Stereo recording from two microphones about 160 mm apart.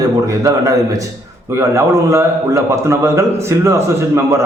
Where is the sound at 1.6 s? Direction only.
20° right (ahead or behind).